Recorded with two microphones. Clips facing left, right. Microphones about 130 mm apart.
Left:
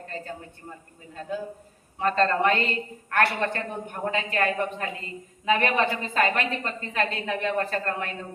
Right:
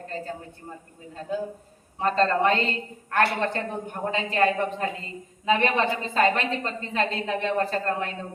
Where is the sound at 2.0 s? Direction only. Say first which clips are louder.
Right 1 dB; 30° right (ahead or behind).